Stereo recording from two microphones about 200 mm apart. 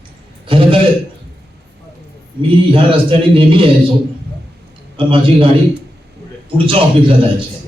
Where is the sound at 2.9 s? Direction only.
25° right (ahead or behind).